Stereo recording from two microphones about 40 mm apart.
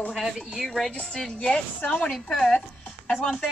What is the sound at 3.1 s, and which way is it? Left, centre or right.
Speech, left.